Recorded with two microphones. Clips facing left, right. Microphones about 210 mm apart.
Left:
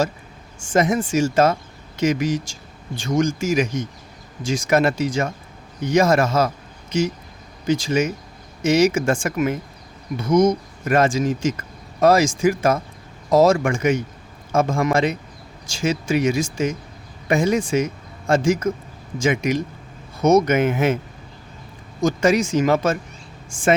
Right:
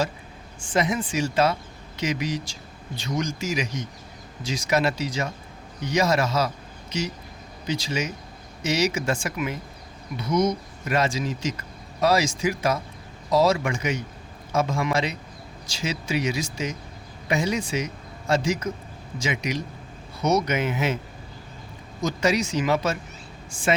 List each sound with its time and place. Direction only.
0.6 s speech: 45° left (ahead or behind)
22.0 s speech: 50° left (ahead or behind)